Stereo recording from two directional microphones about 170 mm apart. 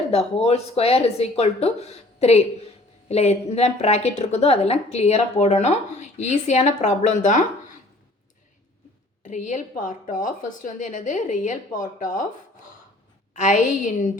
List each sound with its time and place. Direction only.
0.1 s a woman's voice: 35° left (ahead or behind)
9.2 s a woman's voice: 45° left (ahead or behind)
13.3 s a woman's voice: 50° left (ahead or behind)